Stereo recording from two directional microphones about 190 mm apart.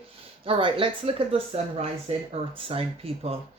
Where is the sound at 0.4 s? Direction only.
30° right (ahead or behind).